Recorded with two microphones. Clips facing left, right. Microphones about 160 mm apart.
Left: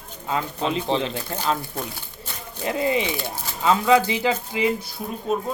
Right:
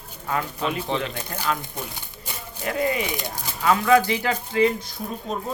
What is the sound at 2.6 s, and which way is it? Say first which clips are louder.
Speech: left 2 dB; 20° left (ahead or behind).